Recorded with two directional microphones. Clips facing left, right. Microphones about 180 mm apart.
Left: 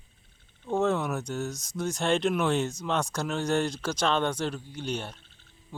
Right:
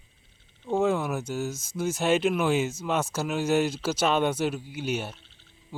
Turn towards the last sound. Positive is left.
turn(degrees=-5)  # may be behind; listen again after turning